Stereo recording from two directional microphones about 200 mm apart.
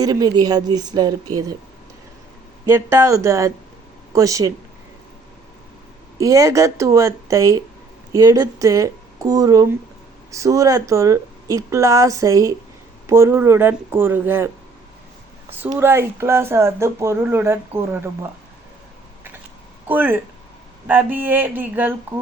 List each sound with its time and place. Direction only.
0.0 s speech: 20° right (ahead or behind)
2.6 s speech: 15° right (ahead or behind)
6.1 s speech: 15° right (ahead or behind)
15.5 s speech: 10° right (ahead or behind)
19.9 s speech: 10° right (ahead or behind)